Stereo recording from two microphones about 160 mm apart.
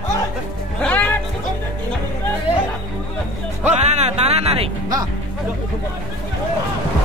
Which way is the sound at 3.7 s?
45° right (ahead or behind).